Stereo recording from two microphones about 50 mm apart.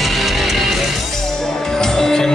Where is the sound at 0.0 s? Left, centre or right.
Centre.